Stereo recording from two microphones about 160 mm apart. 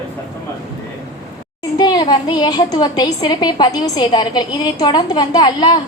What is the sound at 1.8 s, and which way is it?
A woman's voice, 25° left (ahead or behind).